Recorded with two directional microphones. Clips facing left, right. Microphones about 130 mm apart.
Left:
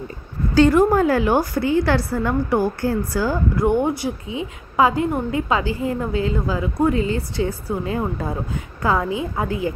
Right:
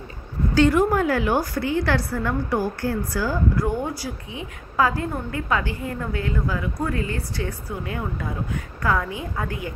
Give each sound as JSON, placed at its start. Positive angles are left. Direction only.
{"t": 0.6, "sound": "a woman's voice", "side_deg": 35}